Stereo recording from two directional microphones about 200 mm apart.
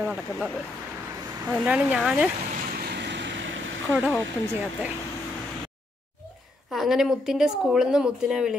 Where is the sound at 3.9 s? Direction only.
5° right (ahead or behind).